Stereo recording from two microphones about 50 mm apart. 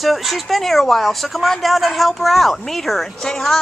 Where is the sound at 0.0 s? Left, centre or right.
Centre.